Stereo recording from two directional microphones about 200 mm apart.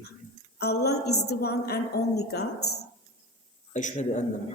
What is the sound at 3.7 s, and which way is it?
Speech, 35° left (ahead or behind).